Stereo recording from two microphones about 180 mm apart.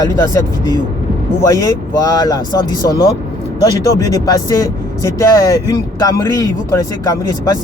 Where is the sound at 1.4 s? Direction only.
15° left (ahead or behind).